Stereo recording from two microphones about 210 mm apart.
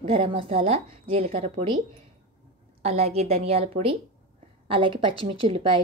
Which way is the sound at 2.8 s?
30° right (ahead or behind).